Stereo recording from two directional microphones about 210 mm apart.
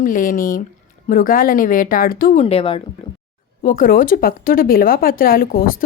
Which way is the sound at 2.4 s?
25° left (ahead or behind).